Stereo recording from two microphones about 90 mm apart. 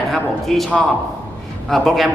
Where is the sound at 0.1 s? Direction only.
Centre (ahead or behind).